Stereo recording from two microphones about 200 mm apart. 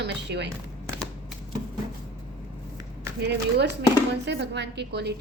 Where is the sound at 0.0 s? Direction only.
60° right (ahead or behind).